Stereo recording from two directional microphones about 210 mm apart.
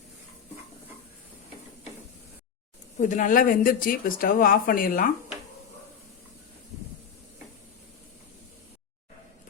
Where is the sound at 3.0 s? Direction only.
35° left (ahead or behind).